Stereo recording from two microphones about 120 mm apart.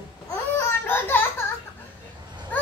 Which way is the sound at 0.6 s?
20° left (ahead or behind).